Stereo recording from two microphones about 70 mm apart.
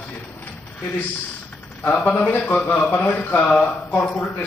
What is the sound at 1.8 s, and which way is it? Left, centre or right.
A man's voice, left.